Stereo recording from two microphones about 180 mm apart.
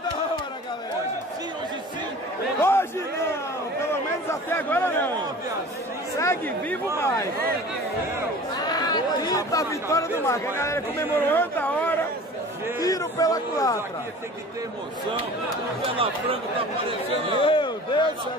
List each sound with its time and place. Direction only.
2.6 s a sound: 15° left (ahead or behind)
3.9 s speech: 10° left (ahead or behind)
6.1 s a man's voice: 15° left (ahead or behind)
8.5 s a man's voice: 20° left (ahead or behind)
12.8 s a man's voice: 20° left (ahead or behind)
17.4 s a sound: 25° left (ahead or behind)